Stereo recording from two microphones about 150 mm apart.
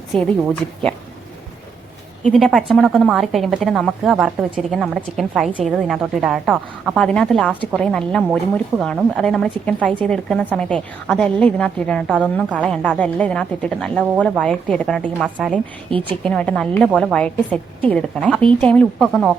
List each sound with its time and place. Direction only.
0.1 s a woman's voice: 5° left (ahead or behind)
2.2 s a woman's voice: centre (ahead or behind)
15.4 s a woman's voice: 10° right (ahead or behind)
15.9 s speech: 35° right (ahead or behind)
16.2 s a woman's voice: 5° left (ahead or behind)